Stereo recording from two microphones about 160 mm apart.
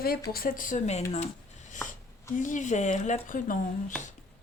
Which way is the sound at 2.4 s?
50° left (ahead or behind).